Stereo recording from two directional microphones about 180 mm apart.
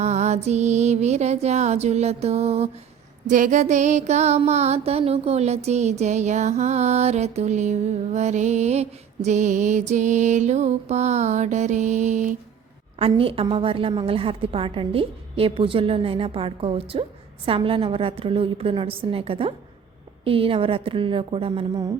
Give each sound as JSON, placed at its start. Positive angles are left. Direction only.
{"t": 0.0, "sound": "mantra", "side_deg": -40}
{"t": 3.2, "sound": "mantra", "side_deg": -45}
{"t": 13.0, "sound": "mantra", "side_deg": -30}